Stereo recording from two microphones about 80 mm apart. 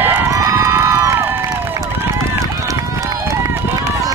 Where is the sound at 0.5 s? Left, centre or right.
Right.